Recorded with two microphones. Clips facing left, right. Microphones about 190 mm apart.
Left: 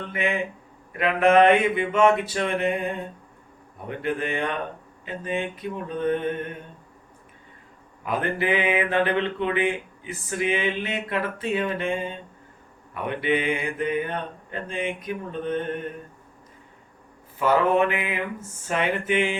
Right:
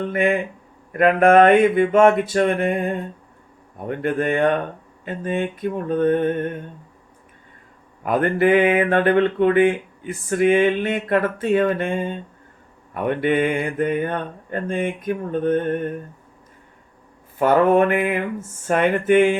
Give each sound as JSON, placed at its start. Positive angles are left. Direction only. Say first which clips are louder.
{"t": 0.0, "sound": "speech", "louder": "right 7 dB", "side_deg": -50}
{"t": 8.0, "sound": "speech", "louder": "right 8 dB", "side_deg": -50}
{"t": 17.4, "sound": "speech", "louder": "right 5 dB", "side_deg": -50}